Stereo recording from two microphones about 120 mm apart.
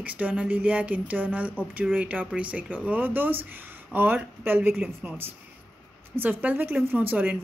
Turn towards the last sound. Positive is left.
turn(degrees=-15)  # may be behind; listen again after turning